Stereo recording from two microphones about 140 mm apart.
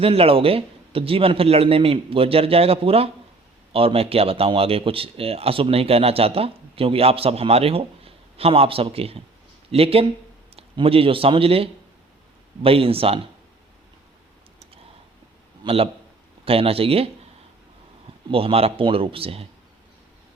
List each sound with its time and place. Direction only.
0.0 s a man's voice: 45° right (ahead or behind)
15.6 s speech: 40° right (ahead or behind)
18.3 s speech: 40° right (ahead or behind)